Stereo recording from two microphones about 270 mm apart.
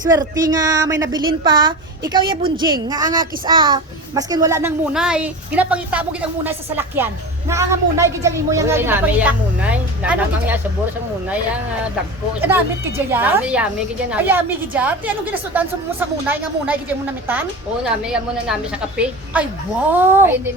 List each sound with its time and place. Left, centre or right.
0.1 s speech: centre
12.4 s a woman's voice: centre